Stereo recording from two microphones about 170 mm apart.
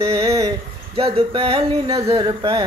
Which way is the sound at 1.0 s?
35° right (ahead or behind).